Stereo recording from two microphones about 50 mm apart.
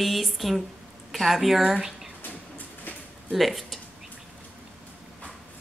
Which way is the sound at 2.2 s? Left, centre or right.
Left.